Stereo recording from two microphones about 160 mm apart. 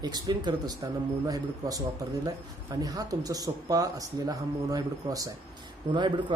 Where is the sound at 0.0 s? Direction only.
25° right (ahead or behind).